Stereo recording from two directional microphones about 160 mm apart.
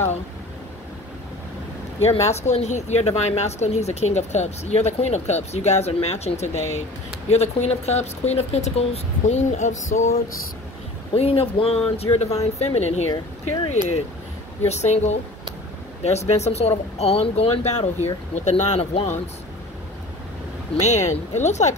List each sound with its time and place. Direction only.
2.0 s a woman's voice: 40° left (ahead or behind)
11.1 s speech: 35° left (ahead or behind)
14.6 s a woman's voice: 45° left (ahead or behind)
20.8 s a woman's voice: 45° left (ahead or behind)